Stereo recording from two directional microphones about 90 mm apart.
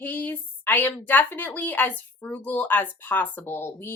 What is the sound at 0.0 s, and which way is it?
Speech, 20° left (ahead or behind).